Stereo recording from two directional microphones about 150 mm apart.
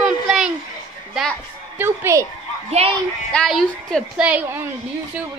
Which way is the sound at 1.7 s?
15° right (ahead or behind).